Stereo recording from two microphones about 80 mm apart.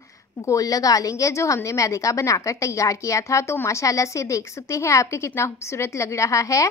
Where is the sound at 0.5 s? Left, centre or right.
Left.